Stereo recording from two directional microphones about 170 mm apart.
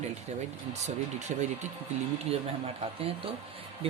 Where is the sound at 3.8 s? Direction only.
35° right (ahead or behind).